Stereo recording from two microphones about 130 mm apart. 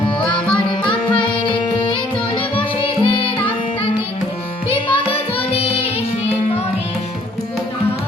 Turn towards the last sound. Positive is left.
turn(degrees=50)  # may be behind; listen again after turning